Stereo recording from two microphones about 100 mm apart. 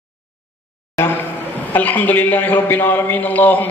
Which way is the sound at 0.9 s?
20° left (ahead or behind).